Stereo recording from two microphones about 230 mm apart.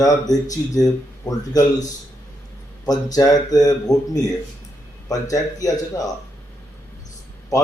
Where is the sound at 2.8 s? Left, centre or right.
Centre.